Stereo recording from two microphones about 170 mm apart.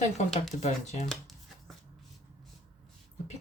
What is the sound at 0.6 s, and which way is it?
Speech, 40° left (ahead or behind).